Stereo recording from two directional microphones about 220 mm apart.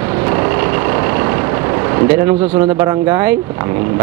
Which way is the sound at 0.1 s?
20° right (ahead or behind).